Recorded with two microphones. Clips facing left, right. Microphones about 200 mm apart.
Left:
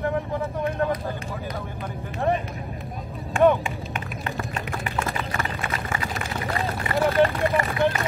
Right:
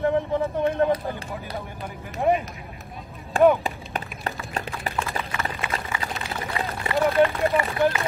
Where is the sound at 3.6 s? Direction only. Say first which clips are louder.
Even; 35° right (ahead or behind).